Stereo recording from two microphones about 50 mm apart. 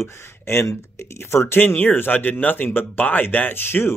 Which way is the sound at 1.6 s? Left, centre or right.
Left.